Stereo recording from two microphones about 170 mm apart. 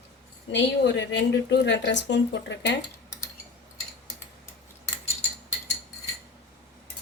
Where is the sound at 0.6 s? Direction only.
90° left.